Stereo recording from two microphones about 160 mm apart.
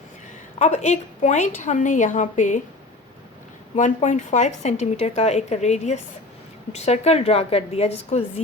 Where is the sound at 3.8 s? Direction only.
50° left (ahead or behind).